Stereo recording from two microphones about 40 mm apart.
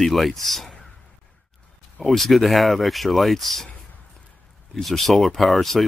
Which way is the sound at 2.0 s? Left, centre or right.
Centre.